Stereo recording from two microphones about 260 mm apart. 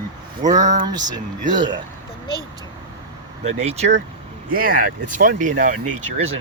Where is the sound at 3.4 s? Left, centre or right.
Right.